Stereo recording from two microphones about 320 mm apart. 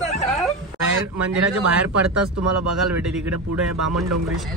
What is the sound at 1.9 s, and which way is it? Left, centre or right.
Speech, right.